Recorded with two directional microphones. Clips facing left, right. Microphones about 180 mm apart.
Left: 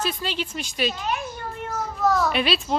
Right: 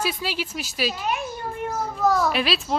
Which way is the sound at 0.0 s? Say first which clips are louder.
Even; 5° right (ahead or behind).